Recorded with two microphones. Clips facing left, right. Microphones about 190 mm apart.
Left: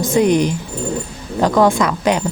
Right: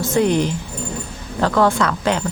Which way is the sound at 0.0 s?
15° left (ahead or behind).